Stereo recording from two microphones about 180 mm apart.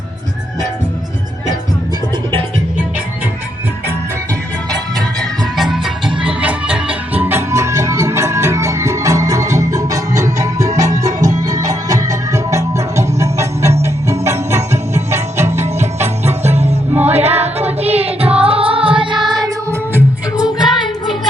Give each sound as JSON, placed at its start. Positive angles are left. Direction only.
{"t": 5.5, "sound": "music", "side_deg": 0}
{"t": 17.2, "sound": "music", "side_deg": -35}
{"t": 19.9, "sound": "music", "side_deg": -10}